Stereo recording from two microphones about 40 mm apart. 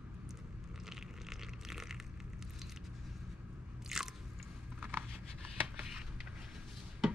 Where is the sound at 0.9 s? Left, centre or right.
Centre.